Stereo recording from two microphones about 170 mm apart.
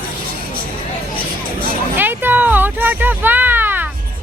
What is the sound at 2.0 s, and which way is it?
Speech, 10° right (ahead or behind).